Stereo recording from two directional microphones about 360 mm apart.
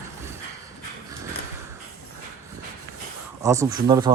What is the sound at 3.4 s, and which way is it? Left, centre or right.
Speech, centre.